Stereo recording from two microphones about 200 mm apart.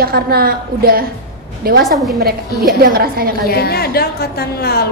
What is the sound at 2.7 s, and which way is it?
Speech, 50° right (ahead or behind).